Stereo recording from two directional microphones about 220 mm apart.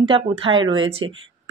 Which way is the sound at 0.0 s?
25° right (ahead or behind).